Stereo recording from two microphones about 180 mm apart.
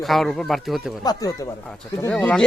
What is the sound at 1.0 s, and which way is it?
Speech, 20° left (ahead or behind).